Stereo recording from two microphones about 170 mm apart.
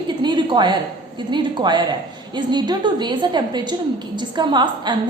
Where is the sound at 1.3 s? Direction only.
25° right (ahead or behind).